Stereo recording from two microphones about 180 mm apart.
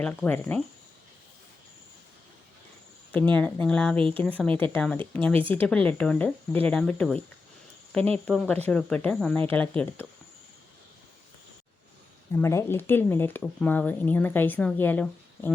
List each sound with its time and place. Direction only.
0.0 s speech: 10° left (ahead or behind)
3.1 s speech: 10° left (ahead or behind)
3.9 s speech: 30° right (ahead or behind)
4.2 s speech: 10° left (ahead or behind)
8.2 s speech: 5° left (ahead or behind)
12.4 s speech: 15° left (ahead or behind)